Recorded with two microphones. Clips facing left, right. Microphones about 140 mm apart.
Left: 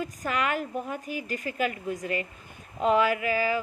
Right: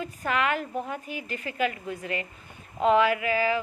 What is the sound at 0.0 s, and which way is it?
A woman's voice, 40° left (ahead or behind).